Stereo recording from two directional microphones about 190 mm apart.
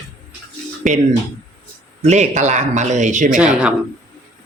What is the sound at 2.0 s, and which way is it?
Speech, 35° right (ahead or behind).